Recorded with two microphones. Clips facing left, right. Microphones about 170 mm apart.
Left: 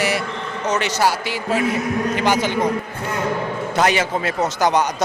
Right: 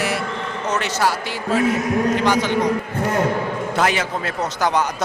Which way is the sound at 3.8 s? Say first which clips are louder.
Left 3 dB; centre (ahead or behind).